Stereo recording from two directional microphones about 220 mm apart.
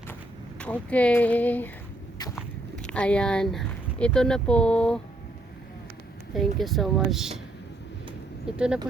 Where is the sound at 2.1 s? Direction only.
15° left (ahead or behind).